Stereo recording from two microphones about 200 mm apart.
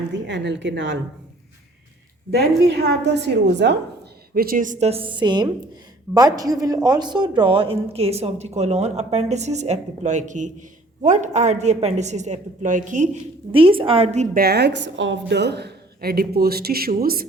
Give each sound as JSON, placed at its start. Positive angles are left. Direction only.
{"t": 0.1, "sound": "a woman's voice", "side_deg": -60}
{"t": 2.3, "sound": "a woman's voice", "side_deg": -55}
{"t": 4.4, "sound": "speech", "side_deg": -45}
{"t": 13.5, "sound": "a woman's voice", "side_deg": -25}
{"t": 14.3, "sound": "a woman's voice", "side_deg": -50}